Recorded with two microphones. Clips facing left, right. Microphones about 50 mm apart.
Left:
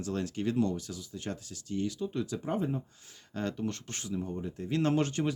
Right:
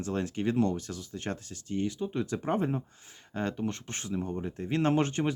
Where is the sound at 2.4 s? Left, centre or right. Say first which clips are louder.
Right 4 dB; right.